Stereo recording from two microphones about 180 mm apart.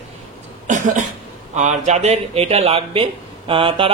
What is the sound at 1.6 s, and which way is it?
A woman's voice, 40° right (ahead or behind).